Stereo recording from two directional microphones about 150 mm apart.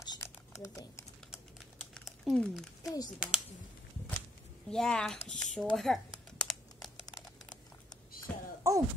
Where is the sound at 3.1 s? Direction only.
5° right (ahead or behind).